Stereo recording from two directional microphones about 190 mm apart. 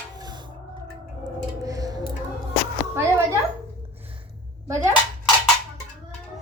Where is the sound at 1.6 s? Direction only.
20° right (ahead or behind).